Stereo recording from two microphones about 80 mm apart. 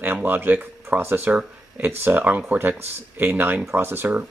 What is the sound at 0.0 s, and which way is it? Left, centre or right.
Speech, right.